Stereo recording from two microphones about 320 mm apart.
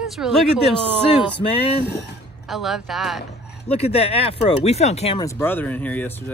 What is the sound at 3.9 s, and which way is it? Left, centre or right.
Speech, centre.